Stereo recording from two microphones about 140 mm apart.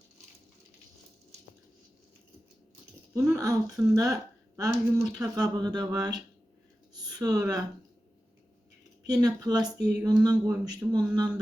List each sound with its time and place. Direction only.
3.2 s a woman's voice: 25° right (ahead or behind)
9.0 s a woman's voice: 25° right (ahead or behind)